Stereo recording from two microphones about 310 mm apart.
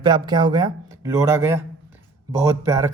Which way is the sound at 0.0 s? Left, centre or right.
Centre.